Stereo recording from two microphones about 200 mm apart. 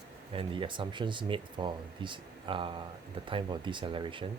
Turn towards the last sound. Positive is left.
turn(degrees=-25)  # may be behind; listen again after turning